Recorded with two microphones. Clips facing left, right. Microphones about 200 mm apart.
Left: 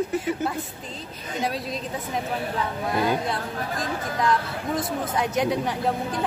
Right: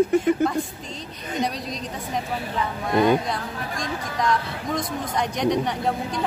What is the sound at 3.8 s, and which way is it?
Speech, 5° left (ahead or behind).